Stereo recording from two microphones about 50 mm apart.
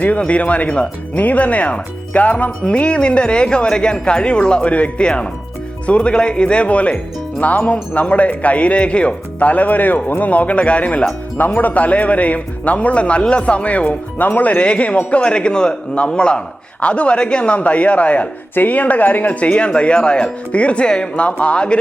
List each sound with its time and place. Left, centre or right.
0.2 s speech: left
11.3 s speech: left